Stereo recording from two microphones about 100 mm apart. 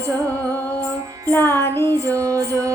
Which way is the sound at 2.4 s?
35° right (ahead or behind).